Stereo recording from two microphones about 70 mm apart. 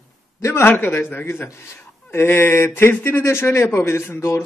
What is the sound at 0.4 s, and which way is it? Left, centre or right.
Speech, left.